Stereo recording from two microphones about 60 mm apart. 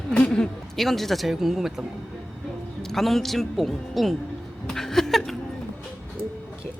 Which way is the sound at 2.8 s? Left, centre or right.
Centre.